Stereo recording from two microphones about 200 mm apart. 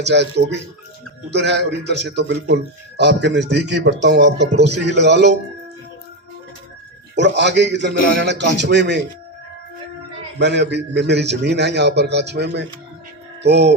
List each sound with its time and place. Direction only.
0.0 s a man's voice: 60° right (ahead or behind)
7.2 s a man's voice: 60° right (ahead or behind)
10.3 s a man's voice: 60° right (ahead or behind)